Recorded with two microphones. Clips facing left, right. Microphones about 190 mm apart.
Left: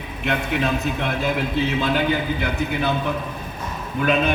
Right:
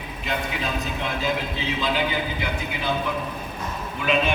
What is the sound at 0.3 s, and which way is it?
A man's voice, 65° left (ahead or behind).